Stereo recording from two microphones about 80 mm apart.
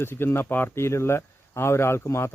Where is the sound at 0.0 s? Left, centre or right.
Left.